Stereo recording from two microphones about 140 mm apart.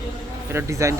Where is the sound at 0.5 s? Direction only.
20° right (ahead or behind).